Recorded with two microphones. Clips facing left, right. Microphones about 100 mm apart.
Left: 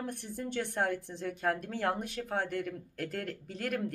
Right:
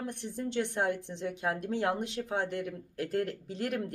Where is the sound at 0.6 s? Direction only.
20° right (ahead or behind).